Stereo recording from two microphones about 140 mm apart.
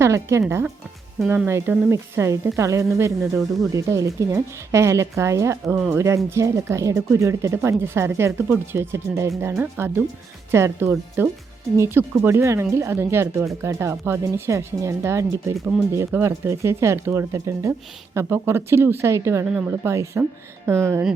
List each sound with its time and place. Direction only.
0.0 s speech: 20° right (ahead or behind)